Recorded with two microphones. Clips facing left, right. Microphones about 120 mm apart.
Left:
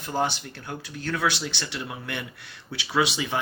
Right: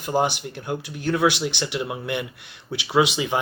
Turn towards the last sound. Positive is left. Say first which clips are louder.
# right 5 dB
turn(degrees=-20)  # may be behind; listen again after turning